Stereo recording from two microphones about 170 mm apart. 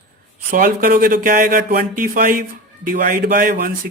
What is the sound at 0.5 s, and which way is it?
Speech, 55° right (ahead or behind).